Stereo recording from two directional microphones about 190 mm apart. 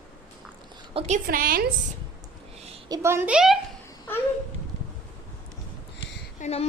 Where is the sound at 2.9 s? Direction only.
15° right (ahead or behind).